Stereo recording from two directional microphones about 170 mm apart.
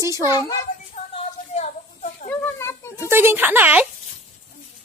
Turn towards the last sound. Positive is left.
turn(degrees=-10)  # may be behind; listen again after turning